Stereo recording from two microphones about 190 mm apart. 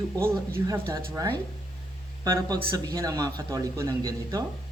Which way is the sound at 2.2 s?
20° right (ahead or behind).